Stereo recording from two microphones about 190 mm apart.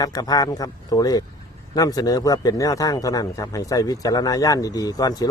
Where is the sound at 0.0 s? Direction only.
20° left (ahead or behind).